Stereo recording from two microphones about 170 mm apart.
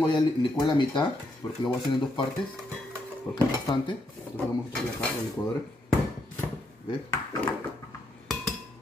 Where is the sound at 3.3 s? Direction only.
20° left (ahead or behind).